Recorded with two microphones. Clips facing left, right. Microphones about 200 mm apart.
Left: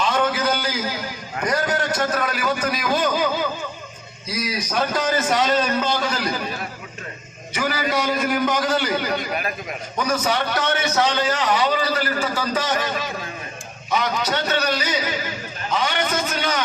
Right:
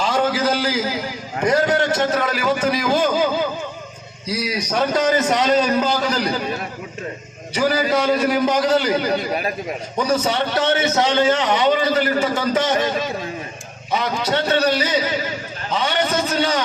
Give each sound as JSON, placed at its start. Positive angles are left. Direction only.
{"t": 0.0, "sound": "a sound", "side_deg": -30}
{"t": 1.4, "sound": "a man's voice", "side_deg": -25}
{"t": 4.3, "sound": "a man's voice", "side_deg": -30}
{"t": 7.5, "sound": "a man's voice", "side_deg": -35}